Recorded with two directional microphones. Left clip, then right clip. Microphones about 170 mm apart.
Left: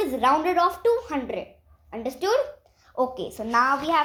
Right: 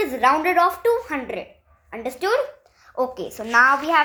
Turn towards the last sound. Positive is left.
turn(degrees=-20)  # may be behind; listen again after turning